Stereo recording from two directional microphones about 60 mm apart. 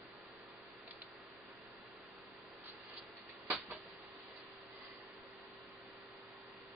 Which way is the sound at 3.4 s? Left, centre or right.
Right.